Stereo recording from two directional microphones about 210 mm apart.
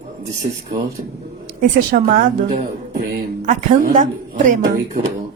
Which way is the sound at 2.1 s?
40° right (ahead or behind).